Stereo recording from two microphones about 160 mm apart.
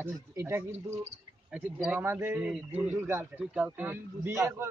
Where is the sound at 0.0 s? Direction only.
15° right (ahead or behind).